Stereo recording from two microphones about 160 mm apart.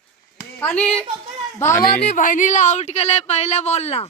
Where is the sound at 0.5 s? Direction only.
10° left (ahead or behind).